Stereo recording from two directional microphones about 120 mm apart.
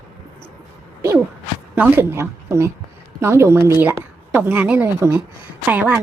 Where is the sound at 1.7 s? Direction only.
15° right (ahead or behind).